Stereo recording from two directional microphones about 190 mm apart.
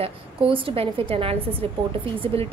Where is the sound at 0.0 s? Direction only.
30° right (ahead or behind).